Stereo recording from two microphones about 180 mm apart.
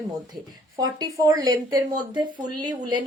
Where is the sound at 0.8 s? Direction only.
20° right (ahead or behind).